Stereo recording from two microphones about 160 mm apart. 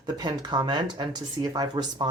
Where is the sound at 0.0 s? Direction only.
25° right (ahead or behind).